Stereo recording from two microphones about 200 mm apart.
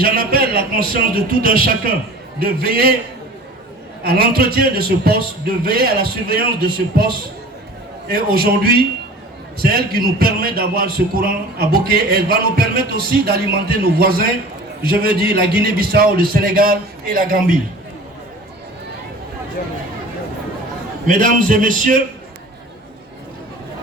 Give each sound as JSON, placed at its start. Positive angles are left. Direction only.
{"t": 0.0, "sound": "a man's voice", "side_deg": -50}
{"t": 4.0, "sound": "a man's voice", "side_deg": -50}
{"t": 21.1, "sound": "a man's voice", "side_deg": -40}